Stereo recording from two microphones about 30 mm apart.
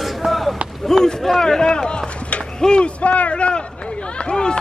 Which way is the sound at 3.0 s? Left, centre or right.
Left.